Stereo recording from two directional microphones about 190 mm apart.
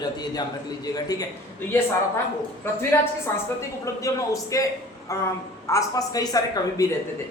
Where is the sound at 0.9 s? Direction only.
20° left (ahead or behind).